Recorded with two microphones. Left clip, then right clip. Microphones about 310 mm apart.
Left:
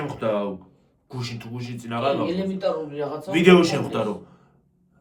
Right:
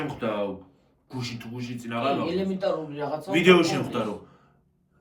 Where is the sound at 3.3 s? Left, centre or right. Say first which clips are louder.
Left 3 dB; centre.